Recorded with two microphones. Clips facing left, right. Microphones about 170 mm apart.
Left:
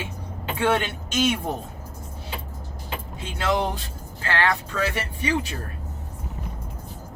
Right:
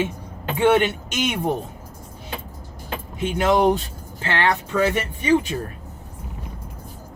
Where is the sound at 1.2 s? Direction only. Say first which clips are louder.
Left 2 dB; 15° right (ahead or behind).